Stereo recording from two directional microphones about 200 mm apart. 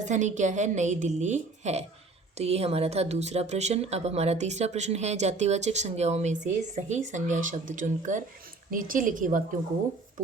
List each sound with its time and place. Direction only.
0.0 s speech: 35° right (ahead or behind)